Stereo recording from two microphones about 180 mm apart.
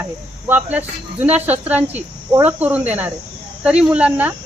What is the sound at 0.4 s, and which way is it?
Speech, 10° right (ahead or behind).